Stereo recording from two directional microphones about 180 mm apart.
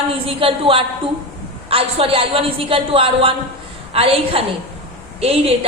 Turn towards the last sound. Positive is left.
turn(degrees=-35)  # may be behind; listen again after turning